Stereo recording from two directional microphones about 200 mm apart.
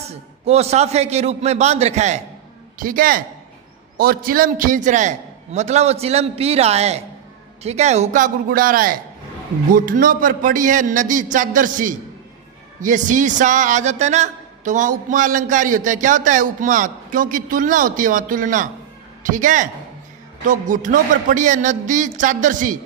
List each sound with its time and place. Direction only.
0.1 s a man's voice: 30° right (ahead or behind)